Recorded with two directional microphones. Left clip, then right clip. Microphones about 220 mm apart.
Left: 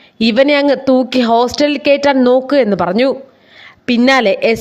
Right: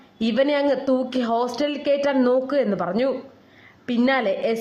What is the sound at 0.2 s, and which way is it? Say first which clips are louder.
A woman's voice: left 10 dB; 35° left (ahead or behind).